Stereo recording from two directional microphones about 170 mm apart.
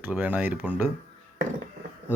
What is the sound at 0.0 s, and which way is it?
Speech, 10° right (ahead or behind).